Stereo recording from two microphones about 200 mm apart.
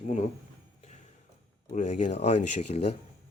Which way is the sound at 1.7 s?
35° left (ahead or behind).